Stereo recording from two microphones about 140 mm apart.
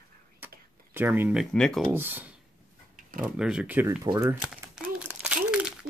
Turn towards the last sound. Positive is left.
turn(degrees=-5)  # may be behind; listen again after turning